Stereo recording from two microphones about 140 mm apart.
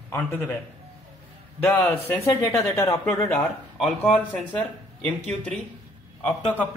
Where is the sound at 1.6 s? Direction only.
15° left (ahead or behind).